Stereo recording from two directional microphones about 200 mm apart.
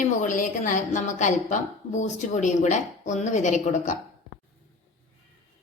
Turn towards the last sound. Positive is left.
turn(degrees=35)  # may be behind; listen again after turning